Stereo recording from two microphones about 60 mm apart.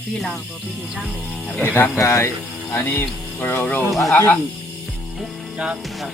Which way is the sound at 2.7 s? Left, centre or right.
Left.